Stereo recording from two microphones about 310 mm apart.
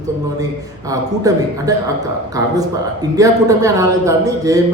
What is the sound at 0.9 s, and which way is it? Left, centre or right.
Speech, centre.